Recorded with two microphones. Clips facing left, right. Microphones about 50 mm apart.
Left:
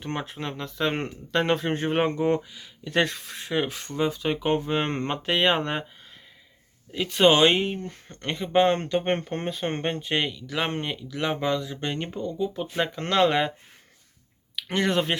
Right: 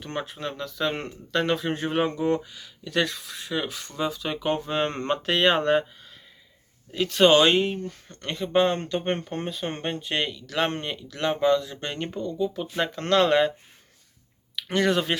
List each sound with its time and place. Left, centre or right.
0.0 s speech: left
6.9 s speech: centre
7.8 s speech: left
10.2 s speech: centre
14.5 s speech: centre